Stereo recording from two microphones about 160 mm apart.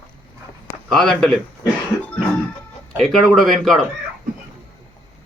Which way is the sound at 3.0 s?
Centre (ahead or behind).